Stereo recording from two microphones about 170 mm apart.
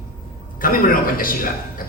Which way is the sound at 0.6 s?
55° left (ahead or behind).